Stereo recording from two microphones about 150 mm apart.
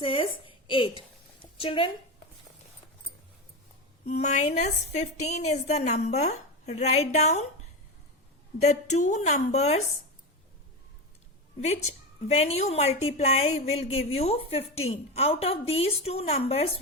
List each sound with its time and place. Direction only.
0.0 s a woman's voice: 35° left (ahead or behind)
1.4 s a sound: 35° left (ahead or behind)
4.0 s a woman's voice: 50° left (ahead or behind)
8.6 s a woman's voice: 50° left (ahead or behind)
12.3 s a woman's voice: 45° left (ahead or behind)